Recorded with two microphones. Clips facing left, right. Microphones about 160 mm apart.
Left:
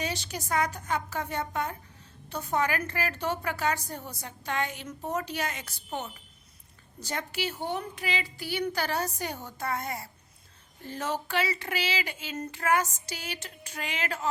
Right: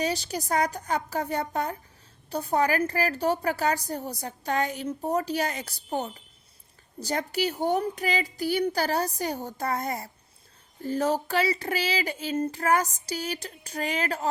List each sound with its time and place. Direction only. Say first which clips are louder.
0.0 s a woman's voice: right 6 dB; 35° right (ahead or behind)